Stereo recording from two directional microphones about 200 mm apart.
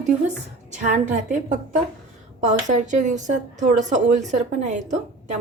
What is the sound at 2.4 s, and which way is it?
A woman's voice, 35° right (ahead or behind).